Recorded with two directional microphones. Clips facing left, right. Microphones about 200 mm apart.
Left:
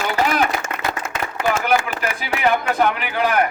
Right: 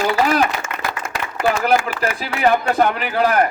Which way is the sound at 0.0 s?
35° right (ahead or behind).